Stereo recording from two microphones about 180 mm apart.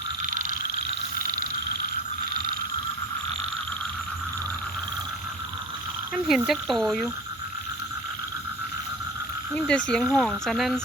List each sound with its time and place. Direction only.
0.2 s frog: 50° right (ahead or behind)
6.2 s speech: centre (ahead or behind)
9.6 s speech: 5° left (ahead or behind)